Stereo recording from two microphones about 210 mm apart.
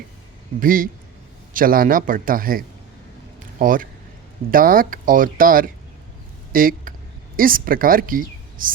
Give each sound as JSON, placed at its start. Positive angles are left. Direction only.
{"t": 0.6, "sound": "a man's voice", "side_deg": -40}